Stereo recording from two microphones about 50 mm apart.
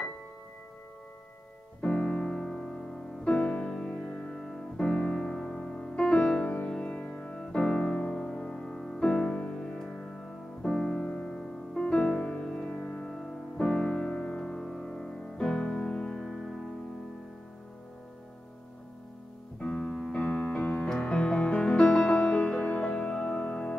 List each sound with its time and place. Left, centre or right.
1.8 s music: centre
3.7 s music: centre
4.4 s piano: centre
6.4 s music: left
7.3 s music: centre
11.7 s music: centre
12.2 s music: left
16.2 s music: centre
19.6 s keyboard: centre
21.0 s music: left
22.1 s music: left